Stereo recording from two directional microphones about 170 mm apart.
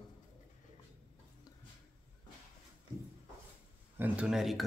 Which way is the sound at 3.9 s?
5° right (ahead or behind).